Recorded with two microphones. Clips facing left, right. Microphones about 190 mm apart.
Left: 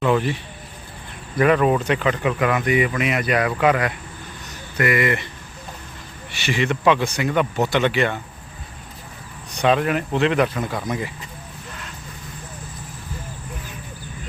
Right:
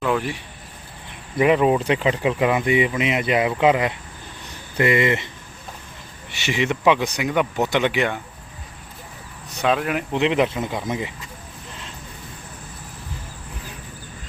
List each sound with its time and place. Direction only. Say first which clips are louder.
0.0 s speech: left 3 dB; 5° left (ahead or behind)
1.4 s speech: even; 20° right (ahead or behind)
6.3 s speech: even; 20° right (ahead or behind)
9.6 s speech: left 2 dB; centre (ahead or behind)
10.1 s speech: right 2 dB; 15° right (ahead or behind)